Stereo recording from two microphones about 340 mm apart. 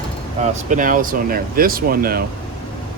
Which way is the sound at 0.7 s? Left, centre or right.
Right.